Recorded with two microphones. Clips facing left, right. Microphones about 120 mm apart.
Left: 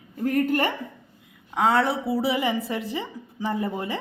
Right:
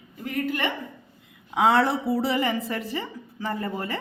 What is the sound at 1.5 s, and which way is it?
A woman's voice, centre (ahead or behind).